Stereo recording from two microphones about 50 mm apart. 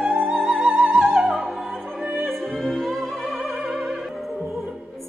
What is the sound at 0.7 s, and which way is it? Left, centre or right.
Music, right.